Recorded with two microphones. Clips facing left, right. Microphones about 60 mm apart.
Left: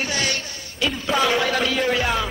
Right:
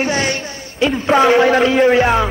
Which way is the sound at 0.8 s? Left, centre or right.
Right.